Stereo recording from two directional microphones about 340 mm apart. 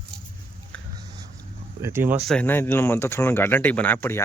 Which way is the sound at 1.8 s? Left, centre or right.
Centre.